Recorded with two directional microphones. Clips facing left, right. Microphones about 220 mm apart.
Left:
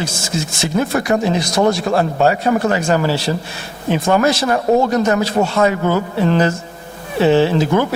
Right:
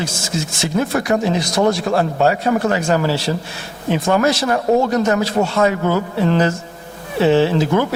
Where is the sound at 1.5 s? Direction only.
35° left (ahead or behind).